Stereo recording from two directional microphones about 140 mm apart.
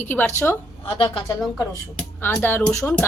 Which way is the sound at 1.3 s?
Centre (ahead or behind).